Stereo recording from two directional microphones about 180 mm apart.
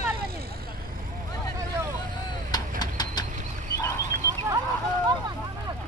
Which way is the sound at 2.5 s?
20° left (ahead or behind).